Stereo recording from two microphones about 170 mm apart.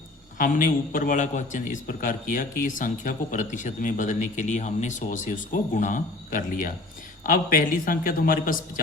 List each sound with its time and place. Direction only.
0.3 s a man's voice: 50° left (ahead or behind)